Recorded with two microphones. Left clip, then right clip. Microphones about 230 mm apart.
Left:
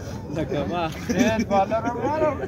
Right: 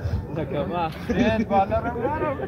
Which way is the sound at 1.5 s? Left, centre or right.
Centre.